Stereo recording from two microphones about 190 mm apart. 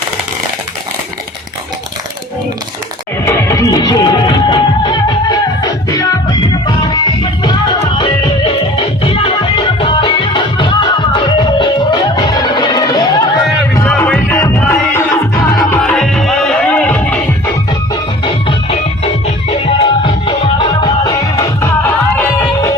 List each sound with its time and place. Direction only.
3.2 s music: 15° left (ahead or behind)
13.8 s music: 5° left (ahead or behind)
15.8 s music: 5° left (ahead or behind)
19.5 s music: 30° left (ahead or behind); by 22.7 s 15° left (ahead or behind)